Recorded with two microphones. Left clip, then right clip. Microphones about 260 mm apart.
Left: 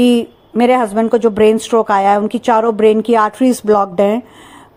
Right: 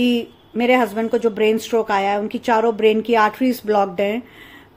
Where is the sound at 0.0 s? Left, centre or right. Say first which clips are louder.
Left 7 dB; centre.